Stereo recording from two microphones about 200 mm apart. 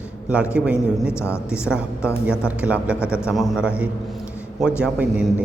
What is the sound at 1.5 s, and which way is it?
A man's voice, 5° right (ahead or behind).